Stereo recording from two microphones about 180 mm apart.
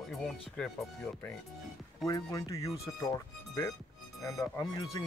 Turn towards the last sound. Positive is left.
turn(degrees=20)  # may be behind; listen again after turning